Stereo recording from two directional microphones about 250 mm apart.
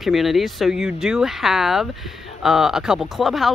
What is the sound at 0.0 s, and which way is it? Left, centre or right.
Speech, centre.